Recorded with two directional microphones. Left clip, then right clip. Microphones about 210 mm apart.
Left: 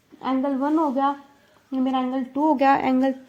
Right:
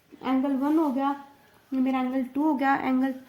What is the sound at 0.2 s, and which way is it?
A woman's voice, 30° left (ahead or behind).